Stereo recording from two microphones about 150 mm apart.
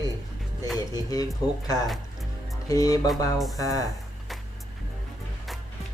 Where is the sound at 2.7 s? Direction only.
25° left (ahead or behind).